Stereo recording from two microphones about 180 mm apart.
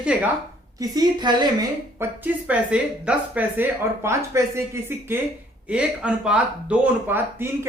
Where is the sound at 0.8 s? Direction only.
25° right (ahead or behind).